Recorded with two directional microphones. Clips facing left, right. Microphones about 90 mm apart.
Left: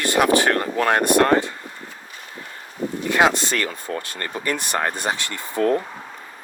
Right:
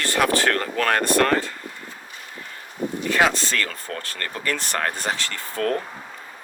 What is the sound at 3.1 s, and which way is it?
Speech, 20° left (ahead or behind).